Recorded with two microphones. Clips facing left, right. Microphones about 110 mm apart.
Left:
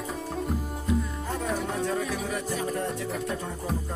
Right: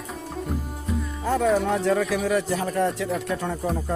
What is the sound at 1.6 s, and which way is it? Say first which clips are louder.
Speech: right 6 dB; 90° right.